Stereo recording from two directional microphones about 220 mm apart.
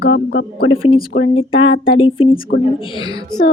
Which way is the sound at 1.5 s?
70° left (ahead or behind).